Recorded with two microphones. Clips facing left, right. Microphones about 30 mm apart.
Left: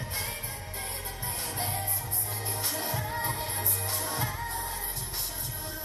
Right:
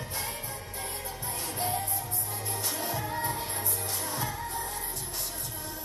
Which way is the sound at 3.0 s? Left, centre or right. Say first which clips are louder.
Even; centre.